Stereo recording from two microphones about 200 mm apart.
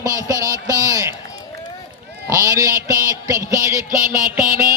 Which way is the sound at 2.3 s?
15° right (ahead or behind).